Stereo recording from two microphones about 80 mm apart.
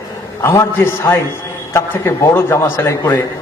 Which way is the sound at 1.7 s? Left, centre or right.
Left.